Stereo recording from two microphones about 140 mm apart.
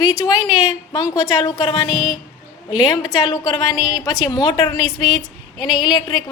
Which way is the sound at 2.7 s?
30° left (ahead or behind).